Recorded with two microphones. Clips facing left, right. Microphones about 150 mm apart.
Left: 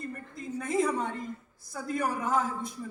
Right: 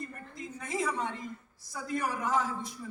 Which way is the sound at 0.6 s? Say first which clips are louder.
Left 5 dB; 50° left (ahead or behind).